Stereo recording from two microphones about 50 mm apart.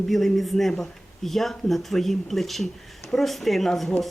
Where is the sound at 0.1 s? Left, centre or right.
Centre.